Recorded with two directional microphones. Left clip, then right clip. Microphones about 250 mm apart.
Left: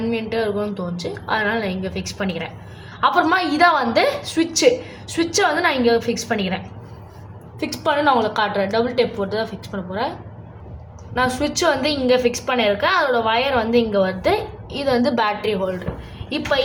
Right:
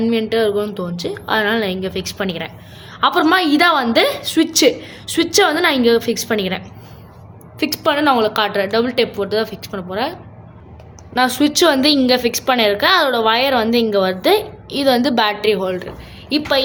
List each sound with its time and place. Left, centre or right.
0.0 s a woman's voice: right
7.6 s a woman's voice: right